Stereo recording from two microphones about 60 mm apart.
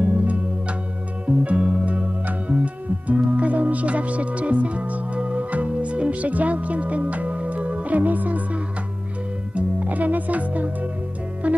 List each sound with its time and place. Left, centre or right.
0.0 s music: right
9.6 s speech: right
11.4 s music: right